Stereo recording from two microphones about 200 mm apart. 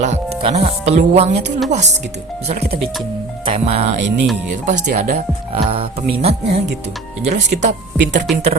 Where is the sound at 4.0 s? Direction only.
65° right (ahead or behind).